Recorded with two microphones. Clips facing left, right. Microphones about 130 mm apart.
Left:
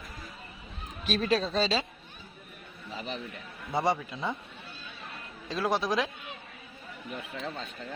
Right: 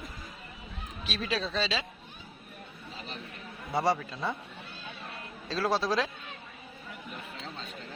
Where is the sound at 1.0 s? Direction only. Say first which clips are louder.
Left 6 dB; 45° left (ahead or behind).